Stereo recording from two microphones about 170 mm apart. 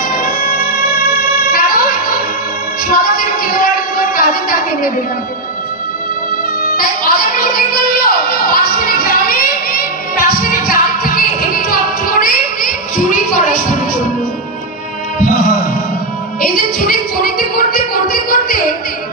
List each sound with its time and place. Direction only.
1.5 s yodeling: 55° left (ahead or behind)
2.9 s a sound: 60° left (ahead or behind)
6.8 s music: 60° left (ahead or behind)
15.1 s music: 55° left (ahead or behind)